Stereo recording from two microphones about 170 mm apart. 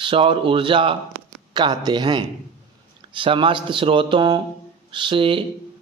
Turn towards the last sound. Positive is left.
turn(degrees=-30)  # may be behind; listen again after turning